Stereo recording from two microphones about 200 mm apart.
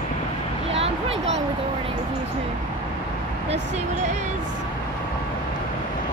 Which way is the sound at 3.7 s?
35° right (ahead or behind).